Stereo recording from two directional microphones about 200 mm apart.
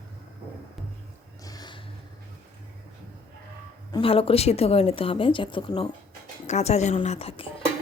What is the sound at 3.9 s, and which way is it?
A woman's voice, 30° left (ahead or behind).